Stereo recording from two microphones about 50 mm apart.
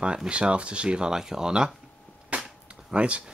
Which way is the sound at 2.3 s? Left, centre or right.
Right.